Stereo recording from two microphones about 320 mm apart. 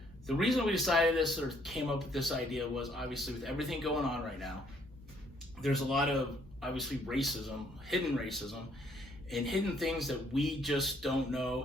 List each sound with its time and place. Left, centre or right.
0.3 s speech: centre
5.5 s speech: centre